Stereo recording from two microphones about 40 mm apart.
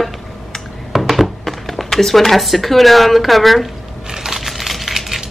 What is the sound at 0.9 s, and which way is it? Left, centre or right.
Speech, centre.